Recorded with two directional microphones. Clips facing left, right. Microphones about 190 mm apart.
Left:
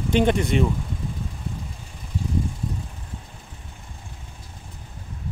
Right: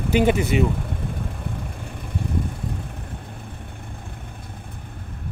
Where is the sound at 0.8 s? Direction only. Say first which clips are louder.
Right 2 dB; 60° right (ahead or behind).